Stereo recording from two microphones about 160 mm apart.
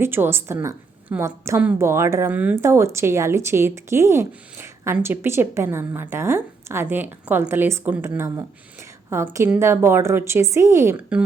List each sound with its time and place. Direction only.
0.0 s a woman's voice: 15° right (ahead or behind)